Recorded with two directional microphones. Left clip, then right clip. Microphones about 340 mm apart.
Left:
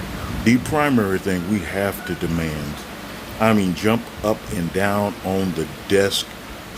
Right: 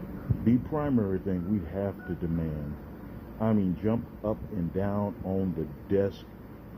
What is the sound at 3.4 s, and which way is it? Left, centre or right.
Speech, centre.